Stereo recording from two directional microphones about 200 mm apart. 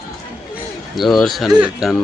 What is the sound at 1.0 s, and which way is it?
Speech, centre (ahead or behind).